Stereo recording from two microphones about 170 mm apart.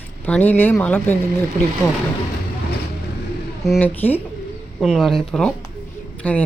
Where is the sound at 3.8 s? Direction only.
10° left (ahead or behind).